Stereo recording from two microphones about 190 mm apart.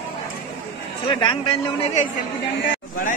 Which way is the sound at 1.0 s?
25° left (ahead or behind).